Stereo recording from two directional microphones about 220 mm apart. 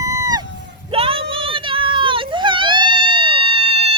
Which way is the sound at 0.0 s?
15° right (ahead or behind).